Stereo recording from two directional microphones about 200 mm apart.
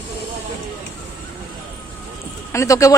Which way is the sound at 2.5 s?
15° left (ahead or behind).